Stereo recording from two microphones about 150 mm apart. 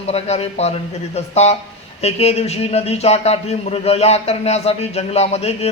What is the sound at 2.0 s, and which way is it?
A man's voice, 45° left (ahead or behind).